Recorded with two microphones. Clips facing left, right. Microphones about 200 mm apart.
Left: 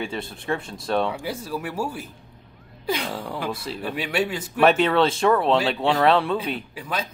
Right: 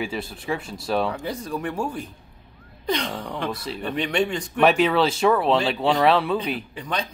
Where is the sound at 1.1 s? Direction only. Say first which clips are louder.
Right 1 dB; 10° left (ahead or behind).